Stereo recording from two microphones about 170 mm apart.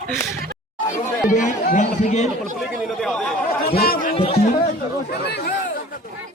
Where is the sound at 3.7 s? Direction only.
65° left (ahead or behind).